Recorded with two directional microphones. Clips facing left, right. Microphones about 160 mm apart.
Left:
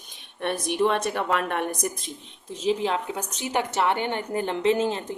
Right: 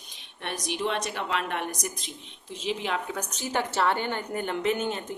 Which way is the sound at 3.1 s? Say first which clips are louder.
Left 2 dB; 20° left (ahead or behind).